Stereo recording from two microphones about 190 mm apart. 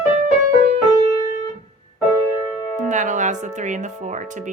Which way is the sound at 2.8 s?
40° right (ahead or behind).